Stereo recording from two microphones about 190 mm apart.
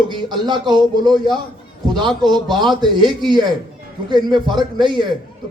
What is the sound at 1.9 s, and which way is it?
A man's voice, 25° right (ahead or behind).